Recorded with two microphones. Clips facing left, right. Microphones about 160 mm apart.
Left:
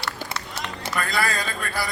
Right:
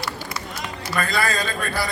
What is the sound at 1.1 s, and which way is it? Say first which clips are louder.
Speech: right 2 dB; 20° right (ahead or behind).